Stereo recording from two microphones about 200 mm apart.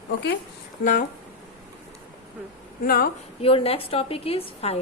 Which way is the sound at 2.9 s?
45° left (ahead or behind).